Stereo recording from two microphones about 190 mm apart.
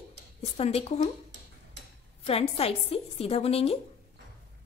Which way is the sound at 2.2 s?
30° left (ahead or behind).